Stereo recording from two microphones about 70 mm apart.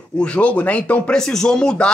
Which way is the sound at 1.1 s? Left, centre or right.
Centre.